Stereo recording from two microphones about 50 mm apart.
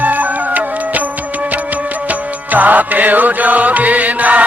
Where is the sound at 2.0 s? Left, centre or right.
Right.